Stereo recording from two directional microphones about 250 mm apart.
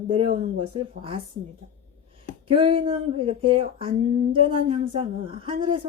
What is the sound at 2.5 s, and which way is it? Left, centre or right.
Speech, right.